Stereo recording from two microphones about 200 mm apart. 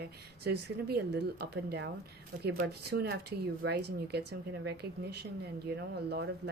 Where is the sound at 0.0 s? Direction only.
55° right (ahead or behind).